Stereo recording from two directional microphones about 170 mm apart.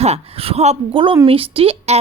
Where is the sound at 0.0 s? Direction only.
35° right (ahead or behind).